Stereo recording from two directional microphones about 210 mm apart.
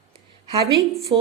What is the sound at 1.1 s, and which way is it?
Speech, 25° right (ahead or behind).